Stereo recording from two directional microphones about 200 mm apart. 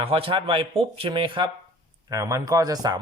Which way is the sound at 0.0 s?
25° right (ahead or behind).